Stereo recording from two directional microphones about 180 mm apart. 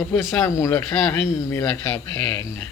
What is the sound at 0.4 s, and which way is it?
Speech, 15° left (ahead or behind).